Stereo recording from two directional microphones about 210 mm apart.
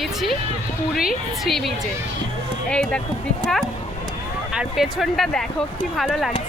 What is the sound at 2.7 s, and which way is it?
Speech, 5° left (ahead or behind).